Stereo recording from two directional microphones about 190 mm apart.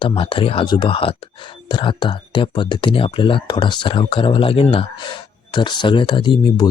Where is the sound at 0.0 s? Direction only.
25° left (ahead or behind).